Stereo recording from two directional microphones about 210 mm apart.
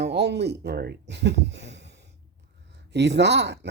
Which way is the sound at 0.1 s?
50° right (ahead or behind).